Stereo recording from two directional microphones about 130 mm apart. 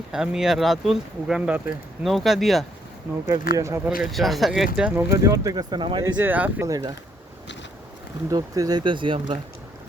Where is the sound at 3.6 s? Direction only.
25° right (ahead or behind).